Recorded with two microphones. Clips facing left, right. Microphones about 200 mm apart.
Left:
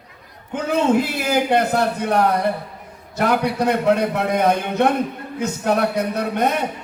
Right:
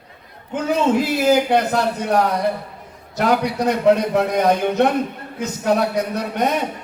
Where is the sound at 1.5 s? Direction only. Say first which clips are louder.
Even; 55° left (ahead or behind).